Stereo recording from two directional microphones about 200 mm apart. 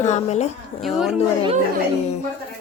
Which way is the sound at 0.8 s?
Centre (ahead or behind).